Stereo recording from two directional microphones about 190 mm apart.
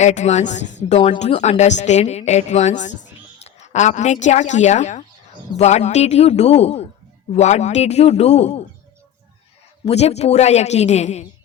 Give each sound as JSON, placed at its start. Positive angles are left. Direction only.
{"t": 0.0, "sound": "speech", "side_deg": 35}
{"t": 9.8, "sound": "speech", "side_deg": 35}